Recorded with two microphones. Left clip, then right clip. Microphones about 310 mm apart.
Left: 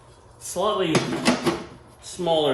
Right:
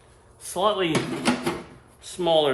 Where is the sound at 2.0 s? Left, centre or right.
Centre.